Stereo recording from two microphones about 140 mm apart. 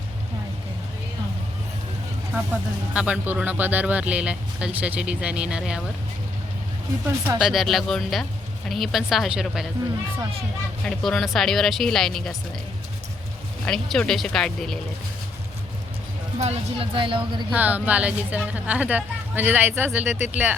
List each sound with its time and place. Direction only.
2.3 s speech: 10° right (ahead or behind)
7.3 s speech: 5° right (ahead or behind)
10.8 s speech: centre (ahead or behind)
13.7 s speech: 5° left (ahead or behind)
16.4 s speech: 50° right (ahead or behind)
17.5 s speech: 10° right (ahead or behind)